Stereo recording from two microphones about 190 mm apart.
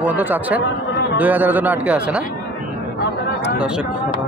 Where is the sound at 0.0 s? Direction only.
10° right (ahead or behind).